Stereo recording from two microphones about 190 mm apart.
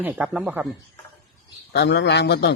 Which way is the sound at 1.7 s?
65° left (ahead or behind).